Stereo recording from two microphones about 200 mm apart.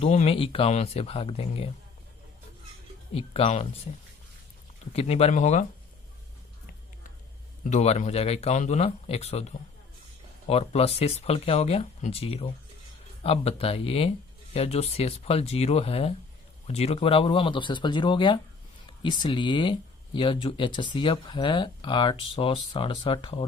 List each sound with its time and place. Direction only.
0.0 s speech: 30° left (ahead or behind)
3.2 s speech: 30° left (ahead or behind)
4.9 s speech: 30° left (ahead or behind)
7.6 s speech: 35° left (ahead or behind)